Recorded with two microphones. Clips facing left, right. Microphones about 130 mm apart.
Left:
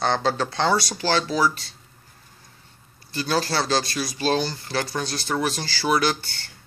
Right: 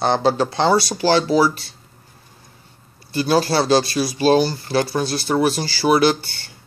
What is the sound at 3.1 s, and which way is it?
A man's voice, 10° right (ahead or behind).